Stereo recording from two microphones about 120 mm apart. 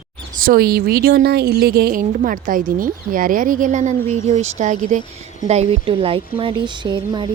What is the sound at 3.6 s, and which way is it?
Speech, 90° right.